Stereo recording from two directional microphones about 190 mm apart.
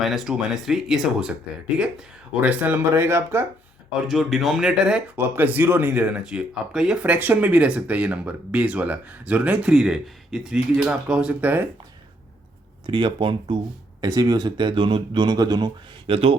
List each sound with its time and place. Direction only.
0.0 s speech: centre (ahead or behind)
4.0 s speech: centre (ahead or behind)
12.8 s speech: 25° right (ahead or behind)